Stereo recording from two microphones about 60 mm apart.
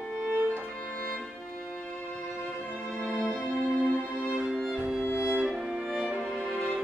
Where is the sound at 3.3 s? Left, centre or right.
Centre.